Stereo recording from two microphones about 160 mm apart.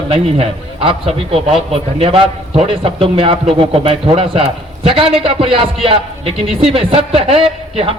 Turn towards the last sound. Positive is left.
turn(degrees=-35)  # may be behind; listen again after turning